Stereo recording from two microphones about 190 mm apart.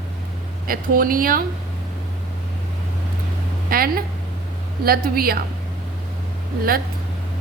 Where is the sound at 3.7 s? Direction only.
50° right (ahead or behind).